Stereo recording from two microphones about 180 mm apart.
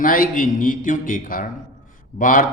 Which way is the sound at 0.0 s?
50° left (ahead or behind).